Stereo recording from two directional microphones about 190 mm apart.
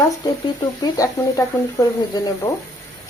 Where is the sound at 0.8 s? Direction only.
15° left (ahead or behind).